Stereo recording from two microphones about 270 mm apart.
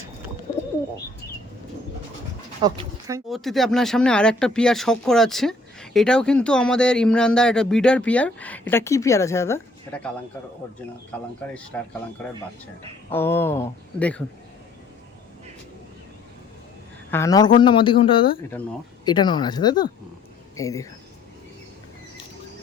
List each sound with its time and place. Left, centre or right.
2.6 s speech: centre
3.2 s a man's voice: centre
13.1 s a man's voice: centre
17.1 s a man's voice: centre